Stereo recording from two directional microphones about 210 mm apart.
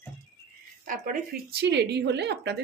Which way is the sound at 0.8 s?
45° right (ahead or behind).